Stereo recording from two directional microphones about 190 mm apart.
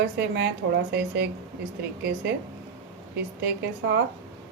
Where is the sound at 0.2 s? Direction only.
60° right (ahead or behind).